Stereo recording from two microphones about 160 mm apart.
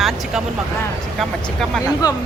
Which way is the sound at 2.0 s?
25° left (ahead or behind).